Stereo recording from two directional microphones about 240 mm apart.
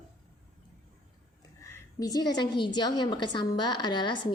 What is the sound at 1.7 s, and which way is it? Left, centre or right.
A woman's voice, centre.